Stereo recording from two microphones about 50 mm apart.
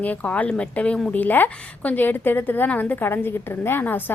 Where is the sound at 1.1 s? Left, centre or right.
Left.